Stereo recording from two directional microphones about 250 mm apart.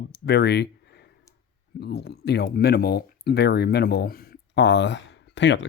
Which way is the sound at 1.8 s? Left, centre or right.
Left.